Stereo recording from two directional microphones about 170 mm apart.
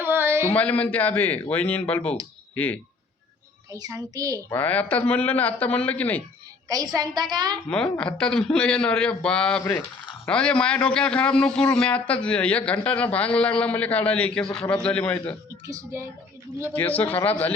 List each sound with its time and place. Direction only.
0.0 s a sound: 10° right (ahead or behind)
0.5 s a man's voice: 10° left (ahead or behind)
3.7 s a child's voice: 20° right (ahead or behind)
4.4 s a man's voice: 10° left (ahead or behind)
6.7 s a child's voice: 20° right (ahead or behind)
7.7 s a man's voice: 5° left (ahead or behind)
15.6 s speech: 20° right (ahead or behind)
16.7 s a man's voice: 10° left (ahead or behind)